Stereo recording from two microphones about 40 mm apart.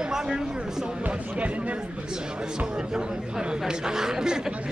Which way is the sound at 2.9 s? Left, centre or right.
Centre.